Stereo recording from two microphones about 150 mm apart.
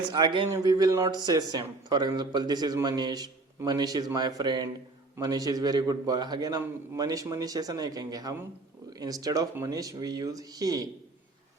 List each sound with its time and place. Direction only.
0.1 s a man's voice: 30° right (ahead or behind)